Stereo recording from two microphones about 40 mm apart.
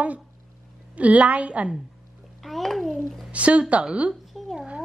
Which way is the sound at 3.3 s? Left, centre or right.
Right.